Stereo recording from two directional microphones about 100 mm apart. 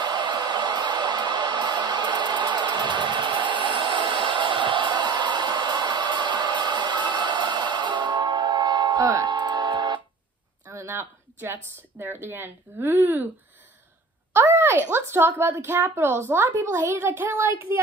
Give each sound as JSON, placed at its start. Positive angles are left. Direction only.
{"t": 0.0, "sound": "a sound", "side_deg": -45}
{"t": 10.7, "sound": "speech", "side_deg": -30}
{"t": 14.3, "sound": "speech", "side_deg": -25}